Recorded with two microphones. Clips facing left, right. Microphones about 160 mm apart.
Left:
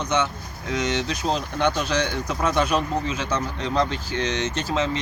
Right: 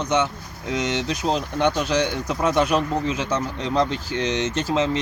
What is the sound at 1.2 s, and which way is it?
Speech, 15° right (ahead or behind).